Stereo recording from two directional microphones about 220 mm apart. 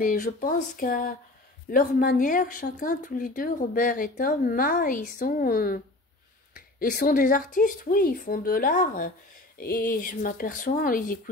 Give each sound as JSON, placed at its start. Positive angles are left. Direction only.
{"t": 0.0, "sound": "speech", "side_deg": 35}